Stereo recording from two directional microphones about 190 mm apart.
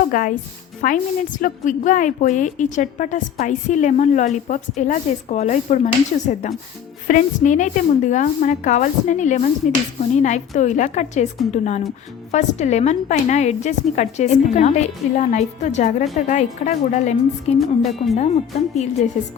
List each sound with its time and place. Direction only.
0.1 s a woman's voice: 45° left (ahead or behind)
17.6 s speech: centre (ahead or behind)
19.2 s a woman's voice: 35° left (ahead or behind)